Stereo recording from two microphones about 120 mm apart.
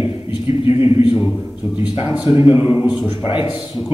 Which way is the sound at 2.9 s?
35° left (ahead or behind).